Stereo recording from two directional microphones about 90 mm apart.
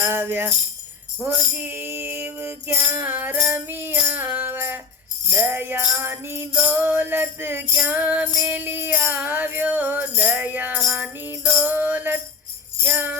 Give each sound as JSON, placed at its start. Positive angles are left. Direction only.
{"t": 0.0, "sound": "music", "side_deg": -25}
{"t": 1.6, "sound": "music", "side_deg": -25}
{"t": 7.8, "sound": "music", "side_deg": -15}
{"t": 12.8, "sound": "jingle bell", "side_deg": -20}